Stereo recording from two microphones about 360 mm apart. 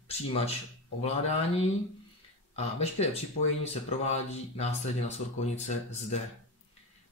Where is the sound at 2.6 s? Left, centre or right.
Centre.